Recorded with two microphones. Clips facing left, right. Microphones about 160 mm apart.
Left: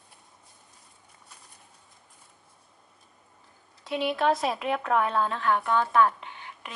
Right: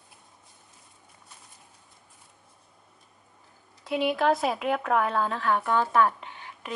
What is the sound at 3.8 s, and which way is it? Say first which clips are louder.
Speech: right 1 dB; centre (ahead or behind).